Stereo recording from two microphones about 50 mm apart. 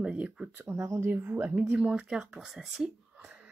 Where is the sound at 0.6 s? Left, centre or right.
Right.